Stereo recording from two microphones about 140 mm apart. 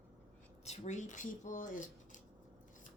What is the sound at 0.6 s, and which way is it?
Speech, 55° left (ahead or behind).